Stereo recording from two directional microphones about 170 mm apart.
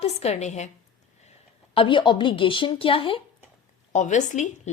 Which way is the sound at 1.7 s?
30° left (ahead or behind).